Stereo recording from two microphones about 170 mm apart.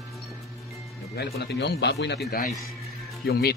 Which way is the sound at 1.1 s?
80° left.